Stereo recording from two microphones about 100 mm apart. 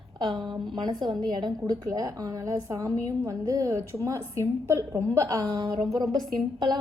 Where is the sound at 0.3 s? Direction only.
45° right (ahead or behind).